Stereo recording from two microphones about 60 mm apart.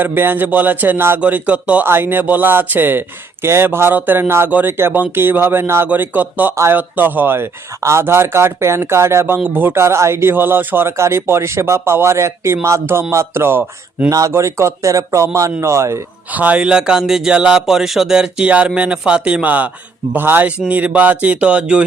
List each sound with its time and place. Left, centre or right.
0.0 s speech: right
1.8 s speech: right
5.9 s speech: right
7.8 s speech: right
8.0 s speech: right
9.4 s speech: right
9.7 s speech: right
14.1 s speech: right
16.3 s speech: right